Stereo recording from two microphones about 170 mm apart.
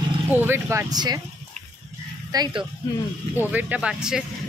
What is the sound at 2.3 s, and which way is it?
Speech, 25° right (ahead or behind).